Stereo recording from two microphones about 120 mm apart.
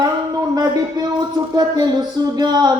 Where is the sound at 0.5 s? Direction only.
30° right (ahead or behind).